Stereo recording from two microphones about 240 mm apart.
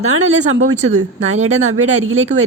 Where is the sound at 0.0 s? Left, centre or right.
Right.